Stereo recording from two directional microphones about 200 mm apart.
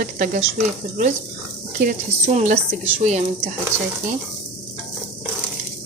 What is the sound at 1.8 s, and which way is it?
Speech, 40° right (ahead or behind).